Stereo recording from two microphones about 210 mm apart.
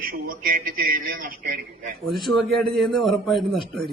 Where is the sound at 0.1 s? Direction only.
45° right (ahead or behind).